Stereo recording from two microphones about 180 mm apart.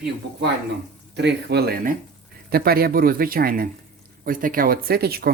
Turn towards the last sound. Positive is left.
turn(degrees=-55)  # may be behind; listen again after turning